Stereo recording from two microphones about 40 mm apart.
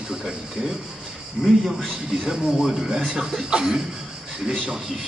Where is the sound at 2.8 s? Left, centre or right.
Right.